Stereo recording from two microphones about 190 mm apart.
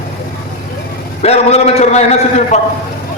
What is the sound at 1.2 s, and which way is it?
A man's voice, 35° left (ahead or behind).